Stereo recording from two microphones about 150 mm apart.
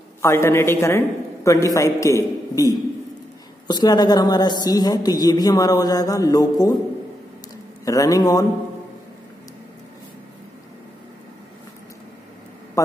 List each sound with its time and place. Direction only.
0.2 s a man's voice: 15° left (ahead or behind)
7.8 s a man's voice: 25° left (ahead or behind)
12.8 s a man's voice: 20° left (ahead or behind)